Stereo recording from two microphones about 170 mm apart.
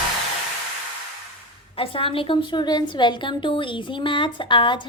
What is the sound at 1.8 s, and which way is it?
A woman's voice, 30° left (ahead or behind).